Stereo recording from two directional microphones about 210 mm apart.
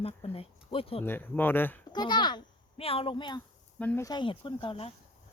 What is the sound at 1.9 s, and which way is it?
A child's voice, 20° left (ahead or behind).